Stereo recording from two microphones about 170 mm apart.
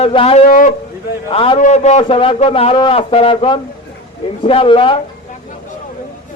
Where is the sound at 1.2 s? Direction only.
30° left (ahead or behind).